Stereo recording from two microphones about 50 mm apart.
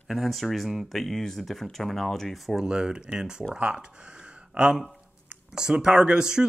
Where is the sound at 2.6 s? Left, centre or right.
Centre.